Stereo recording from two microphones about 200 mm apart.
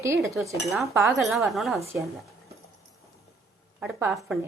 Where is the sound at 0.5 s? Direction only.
Centre (ahead or behind).